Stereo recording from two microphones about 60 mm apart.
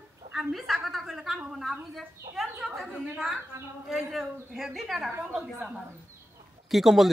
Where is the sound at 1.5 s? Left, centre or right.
Centre.